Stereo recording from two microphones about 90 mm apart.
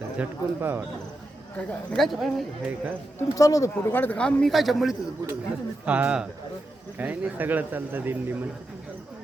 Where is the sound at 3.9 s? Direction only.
20° left (ahead or behind); by 5.0 s centre (ahead or behind).